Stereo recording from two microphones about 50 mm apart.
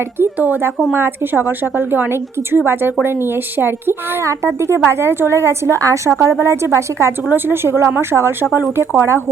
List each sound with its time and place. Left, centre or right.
0.3 s speech: right
0.9 s a woman's voice: right
4.2 s a woman's voice: right
6.4 s a woman's voice: right
7.3 s a woman's voice: right